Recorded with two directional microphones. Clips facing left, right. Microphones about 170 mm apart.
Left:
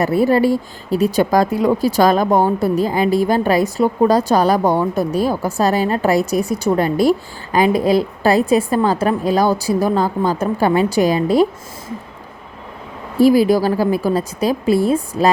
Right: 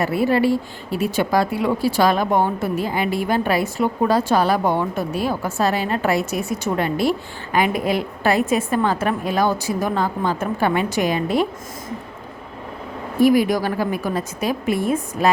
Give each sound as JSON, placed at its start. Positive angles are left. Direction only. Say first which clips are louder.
{"t": 0.0, "sound": "speech", "louder": "left 4 dB", "side_deg": 40}
{"t": 13.1, "sound": "speech", "louder": "left 4 dB", "side_deg": 30}